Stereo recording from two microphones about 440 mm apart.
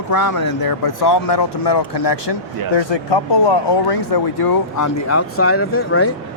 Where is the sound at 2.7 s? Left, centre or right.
Left.